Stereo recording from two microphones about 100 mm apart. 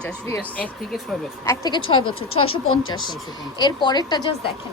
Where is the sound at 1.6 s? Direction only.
50° left (ahead or behind).